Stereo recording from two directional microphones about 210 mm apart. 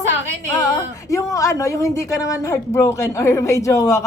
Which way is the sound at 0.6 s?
15° left (ahead or behind).